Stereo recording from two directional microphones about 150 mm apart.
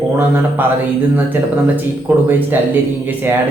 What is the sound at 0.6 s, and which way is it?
Speech, 15° right (ahead or behind).